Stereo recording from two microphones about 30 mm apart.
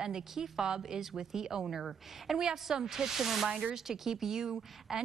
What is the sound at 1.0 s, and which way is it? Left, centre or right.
Speech, centre.